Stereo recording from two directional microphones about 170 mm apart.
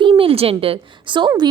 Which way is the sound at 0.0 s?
30° right (ahead or behind).